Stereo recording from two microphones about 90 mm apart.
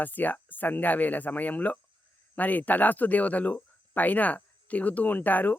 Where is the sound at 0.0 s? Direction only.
20° left (ahead or behind).